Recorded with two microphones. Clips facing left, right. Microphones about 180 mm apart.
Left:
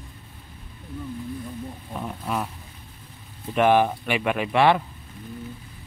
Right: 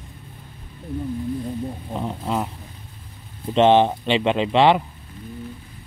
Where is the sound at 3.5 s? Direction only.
25° right (ahead or behind).